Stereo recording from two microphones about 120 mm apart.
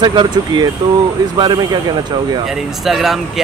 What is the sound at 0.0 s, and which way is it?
Speech, 40° right (ahead or behind).